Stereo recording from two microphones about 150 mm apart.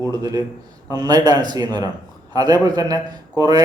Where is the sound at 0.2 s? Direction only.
25° right (ahead or behind).